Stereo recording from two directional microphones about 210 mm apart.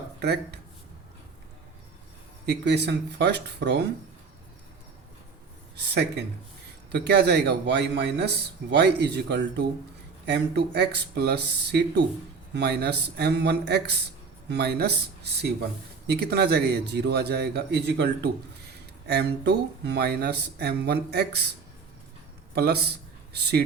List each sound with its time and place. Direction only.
2.5 s speech: 55° right (ahead or behind)
5.7 s speech: 50° right (ahead or behind)
22.5 s a man's voice: 50° right (ahead or behind)